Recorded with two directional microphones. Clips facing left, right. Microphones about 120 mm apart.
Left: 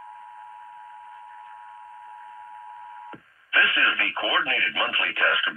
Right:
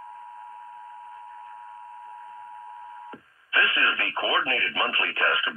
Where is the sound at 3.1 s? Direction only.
25° right (ahead or behind).